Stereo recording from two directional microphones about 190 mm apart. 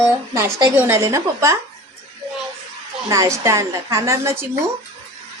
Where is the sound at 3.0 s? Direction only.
15° right (ahead or behind).